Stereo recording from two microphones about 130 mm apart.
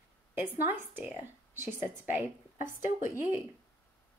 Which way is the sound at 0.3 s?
15° right (ahead or behind).